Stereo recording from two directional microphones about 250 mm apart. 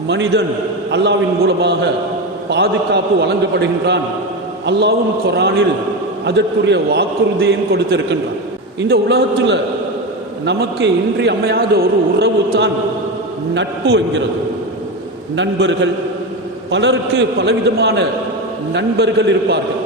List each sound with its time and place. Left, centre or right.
0.1 s a man's voice: right
15.4 s a man's voice: right